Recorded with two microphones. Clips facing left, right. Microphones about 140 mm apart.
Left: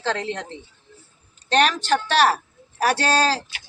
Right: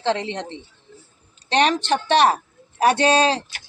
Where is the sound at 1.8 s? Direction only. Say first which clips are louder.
Right 2 dB; 20° right (ahead or behind).